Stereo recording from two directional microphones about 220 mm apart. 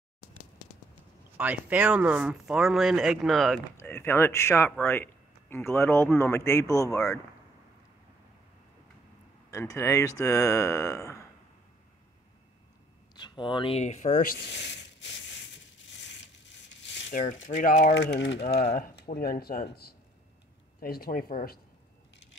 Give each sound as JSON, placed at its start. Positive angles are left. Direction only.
{"t": 1.3, "sound": "speech", "side_deg": -5}
{"t": 3.7, "sound": "speech", "side_deg": 10}
{"t": 9.5, "sound": "speech", "side_deg": 10}
{"t": 13.1, "sound": "speech", "side_deg": 20}
{"t": 15.9, "sound": "crushing", "side_deg": 55}
{"t": 16.8, "sound": "rub", "side_deg": 55}
{"t": 17.1, "sound": "speech", "side_deg": 35}
{"t": 17.9, "sound": "speech", "side_deg": 50}
{"t": 20.8, "sound": "speech", "side_deg": 40}